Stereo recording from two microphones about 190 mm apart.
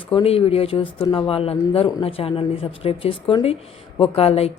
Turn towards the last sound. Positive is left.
turn(degrees=30)  # may be behind; listen again after turning